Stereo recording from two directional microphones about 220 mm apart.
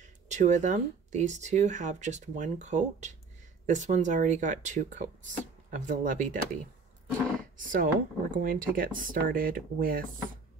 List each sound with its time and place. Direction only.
0.0 s speech: 35° right (ahead or behind)
7.5 s speech: 40° right (ahead or behind)